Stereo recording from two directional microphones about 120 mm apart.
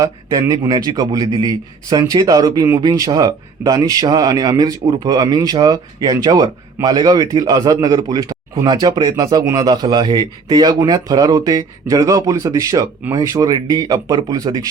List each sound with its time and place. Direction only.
0.0 s a man's voice: 30° right (ahead or behind)